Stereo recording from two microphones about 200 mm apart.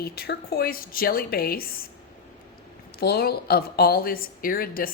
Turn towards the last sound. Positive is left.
turn(degrees=45)  # may be behind; listen again after turning